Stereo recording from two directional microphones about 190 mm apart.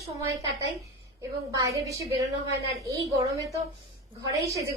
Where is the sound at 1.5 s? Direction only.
20° right (ahead or behind).